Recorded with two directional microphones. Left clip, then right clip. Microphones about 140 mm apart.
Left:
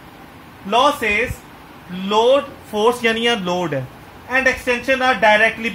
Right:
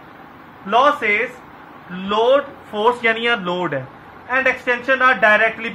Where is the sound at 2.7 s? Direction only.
60° left (ahead or behind).